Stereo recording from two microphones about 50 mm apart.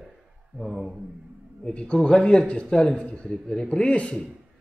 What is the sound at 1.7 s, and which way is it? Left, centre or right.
Speech, left.